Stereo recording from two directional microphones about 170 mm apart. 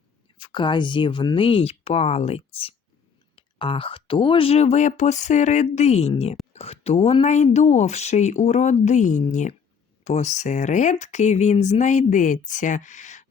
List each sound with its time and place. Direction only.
0.3 s speech: 25° left (ahead or behind); by 13.2 s 45° left (ahead or behind)